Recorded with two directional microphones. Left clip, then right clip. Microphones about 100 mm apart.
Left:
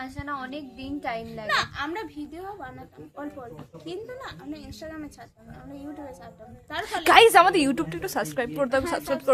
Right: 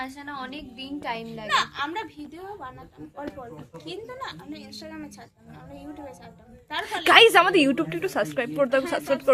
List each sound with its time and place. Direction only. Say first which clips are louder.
0.0 s a woman's voice: left 1 dB; 10° left (ahead or behind)
1.5 s a woman's voice: right 2 dB; 40° left (ahead or behind)
3.8 s a woman's voice: right 1 dB; 35° left (ahead or behind)
7.0 s a woman's voice: even; 5° left (ahead or behind)